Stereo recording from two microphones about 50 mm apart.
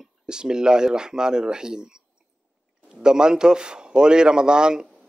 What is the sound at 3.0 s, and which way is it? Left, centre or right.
Speech, centre.